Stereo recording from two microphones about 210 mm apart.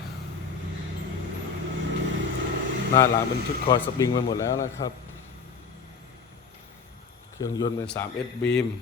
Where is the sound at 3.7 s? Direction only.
15° left (ahead or behind).